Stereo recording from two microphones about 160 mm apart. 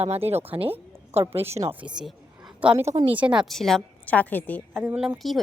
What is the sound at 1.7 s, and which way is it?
A man's voice, 5° right (ahead or behind).